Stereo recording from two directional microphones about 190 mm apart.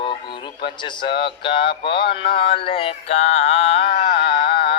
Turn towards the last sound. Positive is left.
turn(degrees=25)  # may be behind; listen again after turning